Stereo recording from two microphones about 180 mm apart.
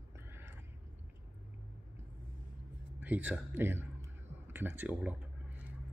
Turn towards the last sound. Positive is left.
turn(degrees=-10)  # may be behind; listen again after turning